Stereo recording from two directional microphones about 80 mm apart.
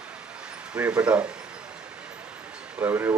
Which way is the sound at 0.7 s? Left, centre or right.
Centre.